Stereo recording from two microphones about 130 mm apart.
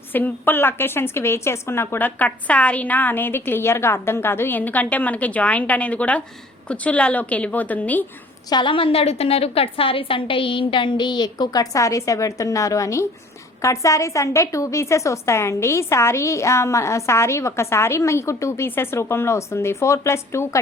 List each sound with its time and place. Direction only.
0.1 s a woman's voice: 15° left (ahead or behind)
8.4 s a woman's voice: 35° left (ahead or behind); by 20.6 s 20° left (ahead or behind)